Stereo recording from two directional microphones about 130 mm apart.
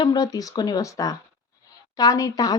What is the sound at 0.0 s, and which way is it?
Speech, 30° left (ahead or behind).